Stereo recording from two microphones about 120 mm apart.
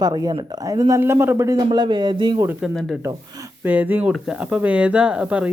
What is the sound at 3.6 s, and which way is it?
Speech, 15° right (ahead or behind).